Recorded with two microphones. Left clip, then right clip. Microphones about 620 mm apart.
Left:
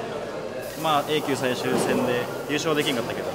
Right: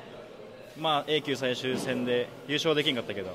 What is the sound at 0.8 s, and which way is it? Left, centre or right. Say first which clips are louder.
Speech: left 4 dB; right.